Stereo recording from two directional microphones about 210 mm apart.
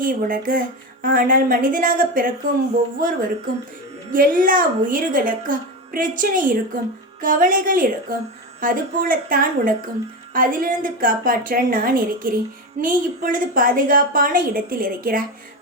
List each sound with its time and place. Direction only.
0.0 s speech: 40° right (ahead or behind)